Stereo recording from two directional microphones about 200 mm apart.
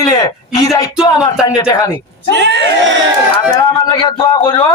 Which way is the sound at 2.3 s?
60° right (ahead or behind).